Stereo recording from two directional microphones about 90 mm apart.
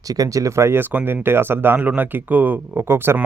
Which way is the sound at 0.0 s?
40° right (ahead or behind).